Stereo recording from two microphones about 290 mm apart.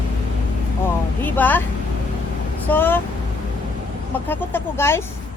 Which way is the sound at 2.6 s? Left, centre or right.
Centre.